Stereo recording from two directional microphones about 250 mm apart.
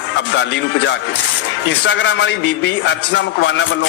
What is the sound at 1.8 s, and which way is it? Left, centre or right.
A man's voice, left.